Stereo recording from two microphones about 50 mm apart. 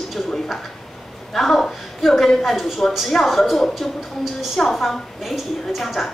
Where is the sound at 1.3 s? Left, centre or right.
Centre.